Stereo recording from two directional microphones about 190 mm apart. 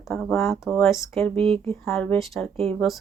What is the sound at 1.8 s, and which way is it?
Speech, 5° left (ahead or behind).